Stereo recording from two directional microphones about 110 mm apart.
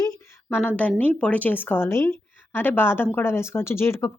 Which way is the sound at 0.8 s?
15° left (ahead or behind).